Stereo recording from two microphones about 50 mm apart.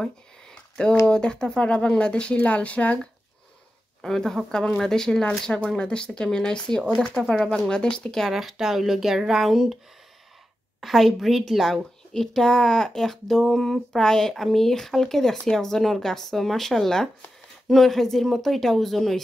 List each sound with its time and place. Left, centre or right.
0.0 s a sound: centre
1.0 s a woman's voice: centre
4.0 s a woman's voice: centre
8.3 s speech: centre
10.8 s a woman's voice: centre